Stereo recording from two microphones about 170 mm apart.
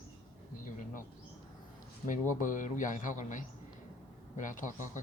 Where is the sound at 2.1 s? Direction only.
50° left (ahead or behind).